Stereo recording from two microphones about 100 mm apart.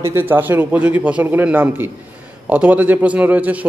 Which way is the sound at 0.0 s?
25° right (ahead or behind).